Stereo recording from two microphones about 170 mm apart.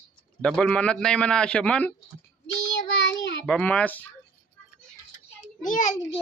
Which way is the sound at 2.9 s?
90° left.